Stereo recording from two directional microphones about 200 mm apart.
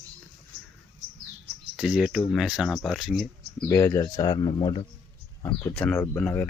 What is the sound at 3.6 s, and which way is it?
Speech, 15° left (ahead or behind).